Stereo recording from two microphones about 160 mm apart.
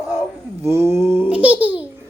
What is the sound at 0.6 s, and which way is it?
A child's voice, 15° right (ahead or behind).